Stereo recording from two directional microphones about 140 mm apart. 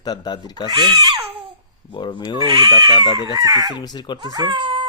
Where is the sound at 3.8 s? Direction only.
30° left (ahead or behind).